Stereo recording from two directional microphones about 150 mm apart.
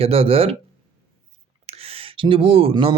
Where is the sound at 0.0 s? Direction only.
40° right (ahead or behind).